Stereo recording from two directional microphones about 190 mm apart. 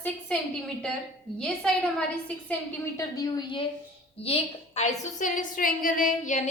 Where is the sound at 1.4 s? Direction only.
5° left (ahead or behind).